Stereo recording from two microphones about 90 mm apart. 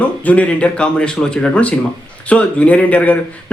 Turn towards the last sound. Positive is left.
turn(degrees=15)  # may be behind; listen again after turning